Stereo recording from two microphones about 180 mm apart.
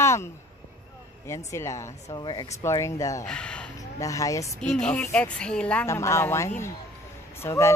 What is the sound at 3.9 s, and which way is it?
Speech, 20° left (ahead or behind).